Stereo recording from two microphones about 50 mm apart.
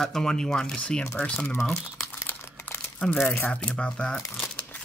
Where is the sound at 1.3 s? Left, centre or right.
Left.